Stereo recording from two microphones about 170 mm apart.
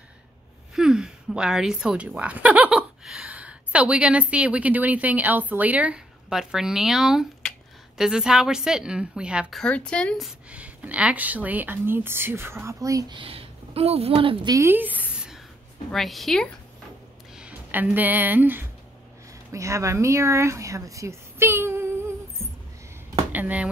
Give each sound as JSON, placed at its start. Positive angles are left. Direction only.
{"t": 0.7, "sound": "a woman's voice", "side_deg": -5}
{"t": 13.2, "sound": "a woman's voice", "side_deg": -35}
{"t": 14.5, "sound": "a woman's voice", "side_deg": -15}
{"t": 17.4, "sound": "a woman's voice", "side_deg": -10}
{"t": 23.3, "sound": "speech", "side_deg": -10}